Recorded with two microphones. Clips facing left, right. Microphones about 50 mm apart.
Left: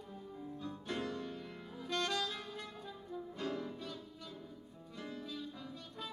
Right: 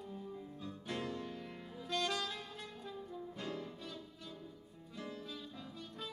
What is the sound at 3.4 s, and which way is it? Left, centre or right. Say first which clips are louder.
Music: left 5 dB; centre.